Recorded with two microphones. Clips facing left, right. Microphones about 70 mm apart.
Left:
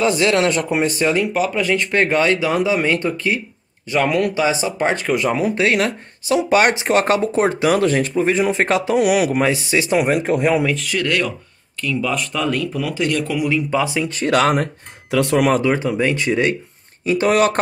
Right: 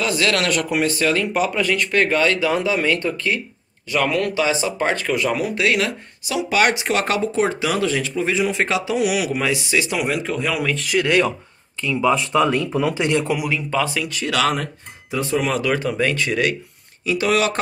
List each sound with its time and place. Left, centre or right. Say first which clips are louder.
0.0 s speech: left 4 dB; left
1.2 s speech: left 1 dB; centre
1.6 s speech: left 2 dB; left
9.9 s speech: left 6 dB; left
10.7 s speech: left 1 dB; centre
11.0 s speech: right 5 dB; centre
13.7 s speech: left 2 dB; centre
14.0 s speech: left 4 dB; left
15.0 s speech: left 6 dB; left
15.6 s speech: left 2 dB; left
17.0 s speech: left 4 dB; left